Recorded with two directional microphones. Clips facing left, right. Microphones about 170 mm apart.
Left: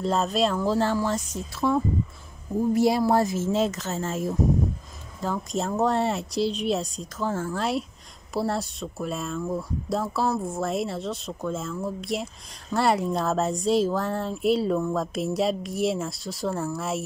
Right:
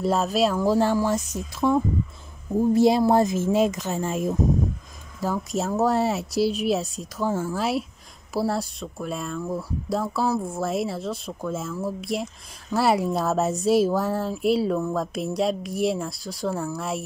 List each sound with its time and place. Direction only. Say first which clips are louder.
0.0 s speech: right 2 dB; 5° right (ahead or behind)
5.2 s speech: right 2 dB; 5° right (ahead or behind)